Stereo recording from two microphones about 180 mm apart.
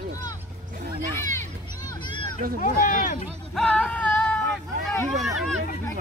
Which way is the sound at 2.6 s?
45° left (ahead or behind).